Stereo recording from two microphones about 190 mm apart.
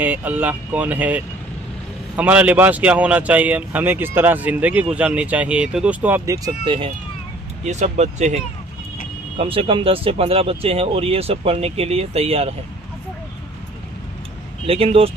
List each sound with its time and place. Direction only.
0.0 s speech: 10° right (ahead or behind); by 6.9 s 25° right (ahead or behind)
7.6 s speech: 40° right (ahead or behind)
9.4 s speech: 30° right (ahead or behind)
14.7 s speech: 30° right (ahead or behind)